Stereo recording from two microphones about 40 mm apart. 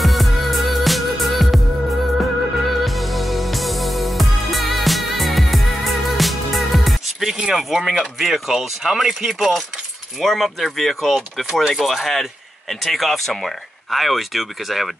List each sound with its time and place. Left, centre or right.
0.0 s music: centre
8.0 s speech: centre
10.2 s speech: centre